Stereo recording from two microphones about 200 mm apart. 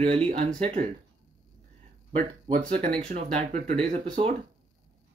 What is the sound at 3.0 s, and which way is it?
Speech, 35° right (ahead or behind).